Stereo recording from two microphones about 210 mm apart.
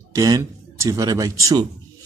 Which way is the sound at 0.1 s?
15° right (ahead or behind).